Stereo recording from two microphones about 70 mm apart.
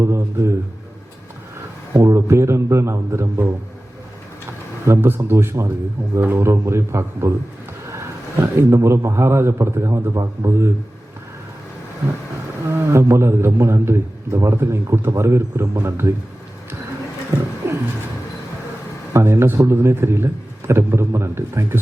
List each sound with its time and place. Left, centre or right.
0.0 s a man's voice: right
1.9 s a man's voice: right
4.9 s a man's voice: right
12.6 s a man's voice: right
17.6 s a sound: right
19.1 s a man's voice: right